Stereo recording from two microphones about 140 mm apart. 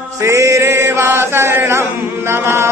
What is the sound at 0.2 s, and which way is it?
Chant, 20° right (ahead or behind).